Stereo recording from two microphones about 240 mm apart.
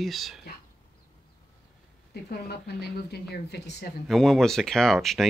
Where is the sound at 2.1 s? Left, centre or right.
Left.